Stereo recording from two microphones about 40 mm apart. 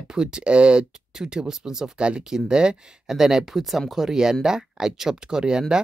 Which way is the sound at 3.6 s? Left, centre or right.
Centre.